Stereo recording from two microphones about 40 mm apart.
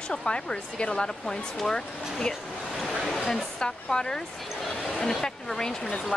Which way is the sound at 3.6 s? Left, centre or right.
Centre.